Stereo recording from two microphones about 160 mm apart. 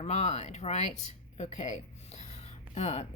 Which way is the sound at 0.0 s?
45° left (ahead or behind).